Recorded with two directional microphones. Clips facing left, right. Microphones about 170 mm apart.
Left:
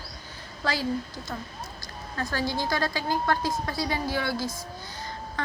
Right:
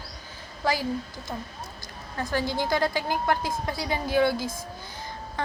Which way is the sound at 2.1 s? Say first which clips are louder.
Right 2 dB; 15° right (ahead or behind).